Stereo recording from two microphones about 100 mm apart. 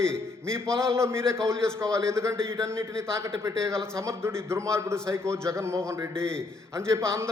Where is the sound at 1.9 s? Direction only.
30° right (ahead or behind).